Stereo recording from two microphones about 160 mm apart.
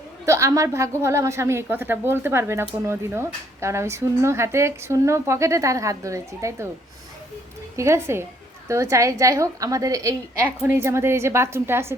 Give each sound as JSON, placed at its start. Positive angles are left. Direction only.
{"t": 0.3, "sound": "a woman's voice", "side_deg": -20}
{"t": 7.8, "sound": "a woman's voice", "side_deg": -15}